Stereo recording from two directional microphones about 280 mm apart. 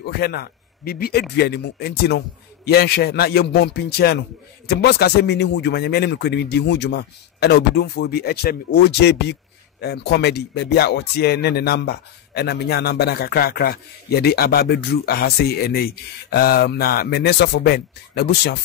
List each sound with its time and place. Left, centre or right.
0.0 s a man's voice: left